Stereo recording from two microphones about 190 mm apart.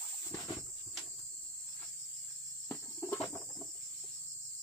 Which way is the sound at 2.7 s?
10° left (ahead or behind).